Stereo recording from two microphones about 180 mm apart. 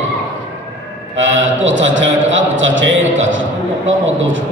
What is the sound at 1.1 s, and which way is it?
A man's voice, 90° right.